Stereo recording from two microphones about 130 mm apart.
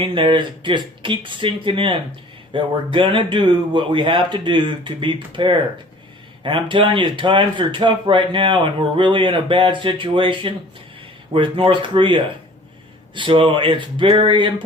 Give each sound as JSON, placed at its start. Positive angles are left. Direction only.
{"t": 0.0, "sound": "speech", "side_deg": -40}